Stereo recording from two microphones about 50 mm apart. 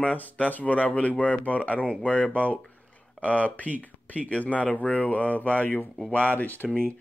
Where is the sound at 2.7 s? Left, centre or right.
Left.